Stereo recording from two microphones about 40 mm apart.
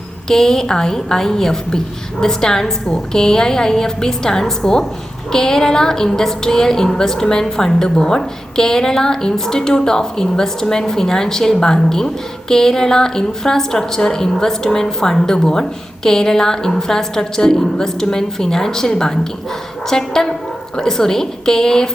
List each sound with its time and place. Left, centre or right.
0.3 s a woman's voice: centre